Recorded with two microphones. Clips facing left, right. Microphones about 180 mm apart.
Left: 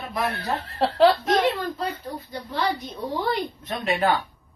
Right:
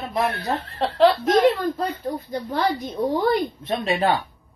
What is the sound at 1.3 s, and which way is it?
A woman's voice, 45° right (ahead or behind).